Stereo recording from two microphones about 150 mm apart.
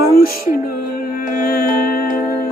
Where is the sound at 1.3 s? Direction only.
90° left.